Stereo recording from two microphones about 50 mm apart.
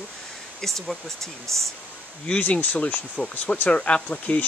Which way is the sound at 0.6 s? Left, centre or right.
Centre.